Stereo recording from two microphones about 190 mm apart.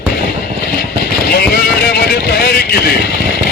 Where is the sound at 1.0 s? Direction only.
55° left (ahead or behind).